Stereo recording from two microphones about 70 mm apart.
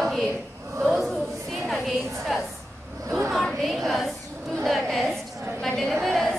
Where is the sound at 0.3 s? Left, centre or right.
Right.